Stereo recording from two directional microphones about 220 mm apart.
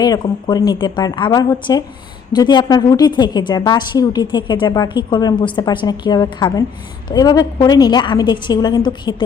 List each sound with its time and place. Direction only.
0.0 s a woman's voice: 20° left (ahead or behind)